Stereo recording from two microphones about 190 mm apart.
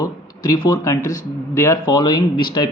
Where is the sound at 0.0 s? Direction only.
20° left (ahead or behind).